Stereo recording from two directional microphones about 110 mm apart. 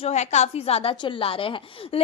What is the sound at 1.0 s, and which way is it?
Speech, 55° left (ahead or behind).